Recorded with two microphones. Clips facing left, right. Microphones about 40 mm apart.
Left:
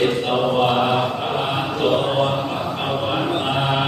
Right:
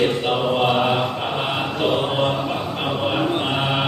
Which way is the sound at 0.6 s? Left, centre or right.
Centre.